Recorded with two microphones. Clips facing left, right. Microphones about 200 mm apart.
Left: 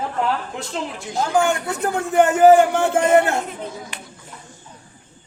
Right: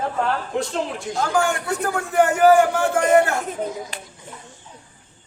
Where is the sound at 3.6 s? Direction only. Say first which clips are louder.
Right 5 dB; 45° right (ahead or behind).